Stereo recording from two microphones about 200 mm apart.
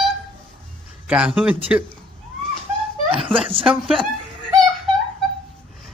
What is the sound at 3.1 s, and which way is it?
Speech, 25° right (ahead or behind).